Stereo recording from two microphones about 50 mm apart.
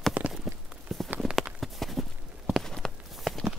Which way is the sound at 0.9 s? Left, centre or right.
Centre.